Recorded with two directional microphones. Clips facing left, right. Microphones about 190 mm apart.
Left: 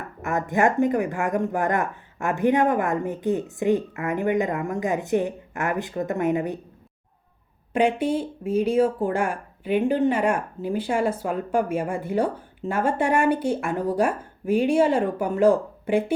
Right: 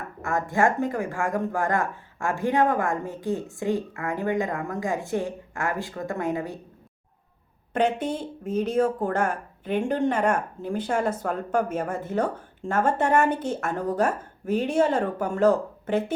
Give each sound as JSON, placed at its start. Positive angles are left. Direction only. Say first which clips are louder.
{"t": 0.2, "sound": "speech", "louder": "left 1 dB", "side_deg": 20}
{"t": 7.7, "sound": "speech", "louder": "left 3 dB", "side_deg": 10}